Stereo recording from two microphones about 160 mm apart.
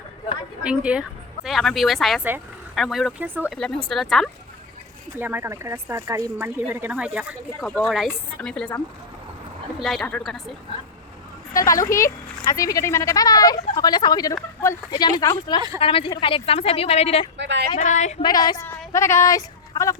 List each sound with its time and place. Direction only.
0.6 s a woman's voice: 5° right (ahead or behind)
3.5 s a woman's voice: 5° left (ahead or behind)
5.1 s a woman's voice: 10° right (ahead or behind); by 8.7 s 5° left (ahead or behind)
9.7 s a woman's voice: centre (ahead or behind)
11.5 s a woman's voice: 20° left (ahead or behind); by 17.2 s 40° left (ahead or behind)
17.3 s speech: 90° right
17.7 s speech: 50° left (ahead or behind)
18.2 s speech: 25° left (ahead or behind)